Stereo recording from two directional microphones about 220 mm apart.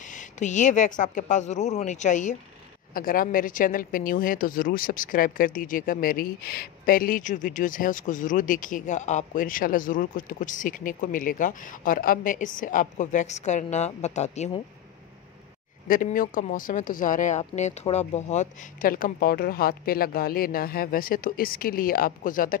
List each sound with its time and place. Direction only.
0.1 s speech: 35° left (ahead or behind)
15.9 s speech: 40° left (ahead or behind)